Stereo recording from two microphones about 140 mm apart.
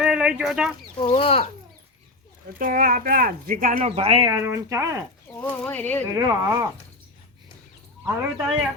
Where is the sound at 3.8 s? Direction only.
50° right (ahead or behind).